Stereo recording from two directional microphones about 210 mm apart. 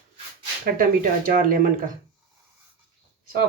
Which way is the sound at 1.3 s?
40° right (ahead or behind).